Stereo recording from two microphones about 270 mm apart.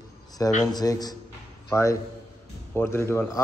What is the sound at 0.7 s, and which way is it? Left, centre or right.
A man's voice, centre.